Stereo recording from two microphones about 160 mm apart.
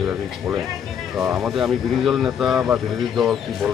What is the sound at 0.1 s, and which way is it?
Speech, 10° right (ahead or behind).